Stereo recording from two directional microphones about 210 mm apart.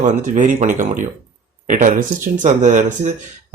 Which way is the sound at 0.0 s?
35° right (ahead or behind).